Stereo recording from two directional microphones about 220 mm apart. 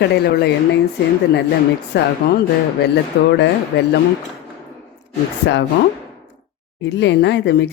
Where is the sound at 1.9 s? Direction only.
50° left (ahead or behind).